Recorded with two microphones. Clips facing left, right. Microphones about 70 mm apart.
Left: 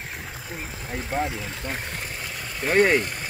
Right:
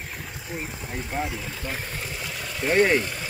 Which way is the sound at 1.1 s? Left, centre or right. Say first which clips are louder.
Left 3 dB; left.